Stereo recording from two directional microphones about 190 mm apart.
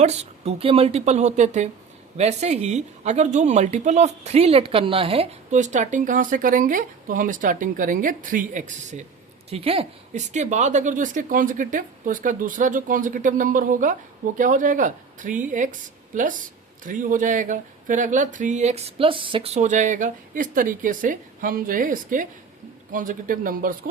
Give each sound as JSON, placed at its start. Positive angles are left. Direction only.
{"t": 0.0, "sound": "a woman's voice", "side_deg": -35}